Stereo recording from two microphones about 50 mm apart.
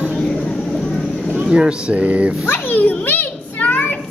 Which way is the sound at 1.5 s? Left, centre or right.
Right.